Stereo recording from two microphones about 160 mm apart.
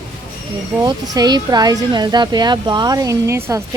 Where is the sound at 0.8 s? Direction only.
25° right (ahead or behind).